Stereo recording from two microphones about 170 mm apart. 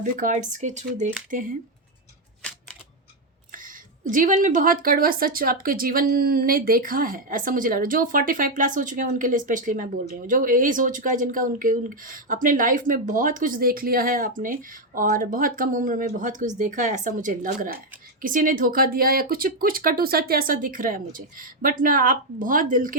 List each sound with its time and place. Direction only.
0.0 s speech: 50° right (ahead or behind)
4.1 s speech: 50° right (ahead or behind)